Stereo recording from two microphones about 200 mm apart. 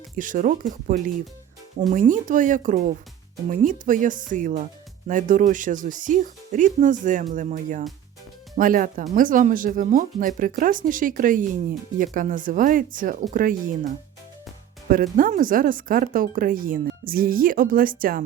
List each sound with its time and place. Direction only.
0.2 s speech: 40° right (ahead or behind)